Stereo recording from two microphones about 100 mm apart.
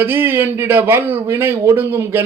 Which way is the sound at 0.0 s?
20° right (ahead or behind).